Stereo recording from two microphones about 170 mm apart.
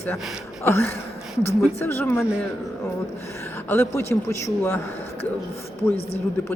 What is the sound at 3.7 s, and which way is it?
A woman's voice, 15° left (ahead or behind).